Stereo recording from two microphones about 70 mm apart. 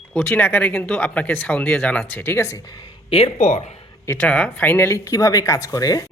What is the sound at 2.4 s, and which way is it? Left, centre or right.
Speech, left.